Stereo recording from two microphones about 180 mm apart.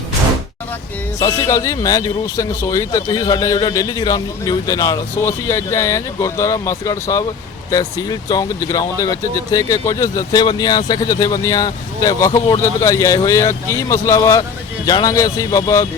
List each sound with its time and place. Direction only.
1.2 s speech: 15° left (ahead or behind)